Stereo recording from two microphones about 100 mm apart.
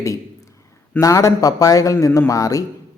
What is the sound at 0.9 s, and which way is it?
Speech, 30° left (ahead or behind).